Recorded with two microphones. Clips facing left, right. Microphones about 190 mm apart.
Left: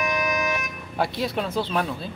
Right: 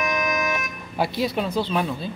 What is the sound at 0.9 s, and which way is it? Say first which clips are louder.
Speech: right 2 dB; centre (ahead or behind).